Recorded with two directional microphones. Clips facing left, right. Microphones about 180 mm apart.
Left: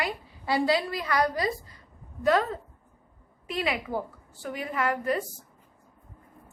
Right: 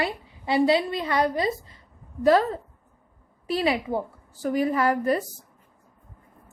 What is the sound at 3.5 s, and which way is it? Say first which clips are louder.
Speech: right 5 dB; 35° right (ahead or behind).